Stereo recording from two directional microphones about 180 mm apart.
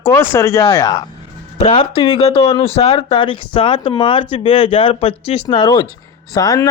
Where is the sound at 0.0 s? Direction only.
15° left (ahead or behind).